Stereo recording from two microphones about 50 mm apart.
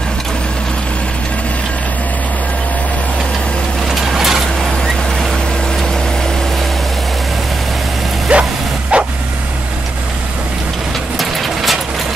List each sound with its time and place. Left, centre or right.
3.9 s mechanisms: centre
8.3 s bow-wow: right
8.9 s vehicle: right
11.1 s vehicle: centre